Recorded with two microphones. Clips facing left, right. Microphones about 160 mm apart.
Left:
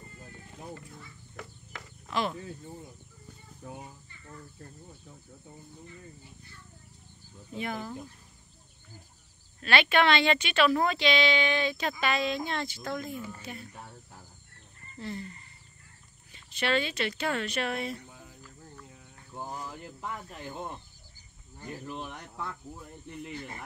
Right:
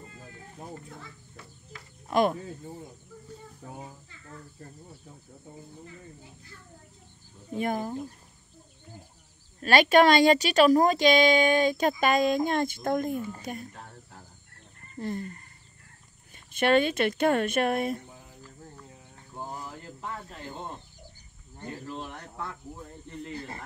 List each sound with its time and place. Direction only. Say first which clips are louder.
2.0 s cricket: right 8 dB; 50° right (ahead or behind)
7.5 s speech: right 6 dB; 45° right (ahead or behind)
9.6 s speech: right 6 dB; 40° right (ahead or behind)
15.0 s frog: right 5 dB; 50° right (ahead or behind)
16.5 s speech: right 7 dB; 50° right (ahead or behind)
19.8 s cricket: right 1 dB; 15° left (ahead or behind)
21.8 s speech: right 1 dB; 15° left (ahead or behind)
23.3 s speech: right 4 dB; 35° right (ahead or behind)